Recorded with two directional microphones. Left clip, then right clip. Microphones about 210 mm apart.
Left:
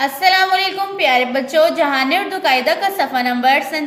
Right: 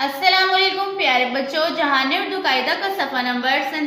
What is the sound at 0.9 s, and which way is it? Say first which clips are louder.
A woman's voice: left 6 dB; 50° left (ahead or behind).